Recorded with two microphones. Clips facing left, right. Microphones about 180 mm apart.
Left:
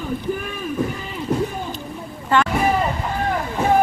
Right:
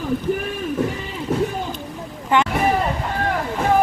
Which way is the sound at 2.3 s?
15° right (ahead or behind).